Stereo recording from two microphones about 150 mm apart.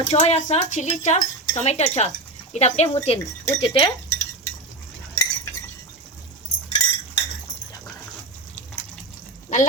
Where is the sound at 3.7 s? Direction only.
35° left (ahead or behind).